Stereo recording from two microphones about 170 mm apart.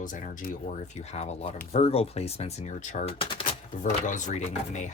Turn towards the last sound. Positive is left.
turn(degrees=45)  # may be behind; listen again after turning